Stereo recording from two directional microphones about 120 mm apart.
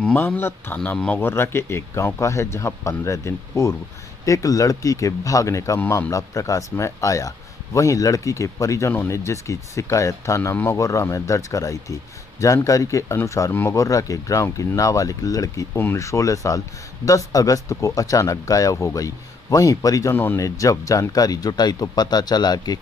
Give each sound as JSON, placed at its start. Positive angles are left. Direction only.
{"t": 0.0, "sound": "speech", "side_deg": 10}
{"t": 0.7, "sound": "speech", "side_deg": 5}